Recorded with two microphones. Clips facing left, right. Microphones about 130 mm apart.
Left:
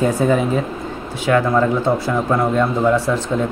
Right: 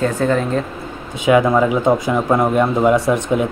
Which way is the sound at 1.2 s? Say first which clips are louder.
Right 3 dB; 15° right (ahead or behind).